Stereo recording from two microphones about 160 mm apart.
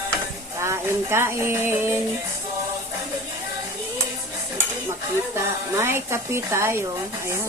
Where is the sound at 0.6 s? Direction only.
15° right (ahead or behind).